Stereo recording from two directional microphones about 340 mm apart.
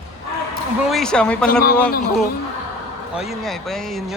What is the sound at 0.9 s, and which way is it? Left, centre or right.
Speech, centre.